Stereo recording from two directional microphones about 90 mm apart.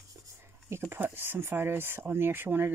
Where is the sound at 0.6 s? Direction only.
25° right (ahead or behind).